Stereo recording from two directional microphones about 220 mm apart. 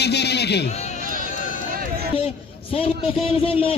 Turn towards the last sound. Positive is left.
turn(degrees=25)  # may be behind; listen again after turning